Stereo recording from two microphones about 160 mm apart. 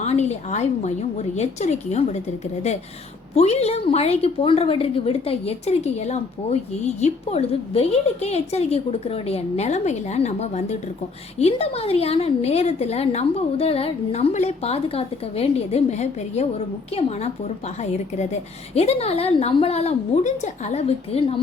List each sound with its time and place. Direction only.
0.0 s a woman's voice: 45° left (ahead or behind)
3.3 s a woman's voice: 40° left (ahead or behind)
18.7 s a woman's voice: 40° left (ahead or behind)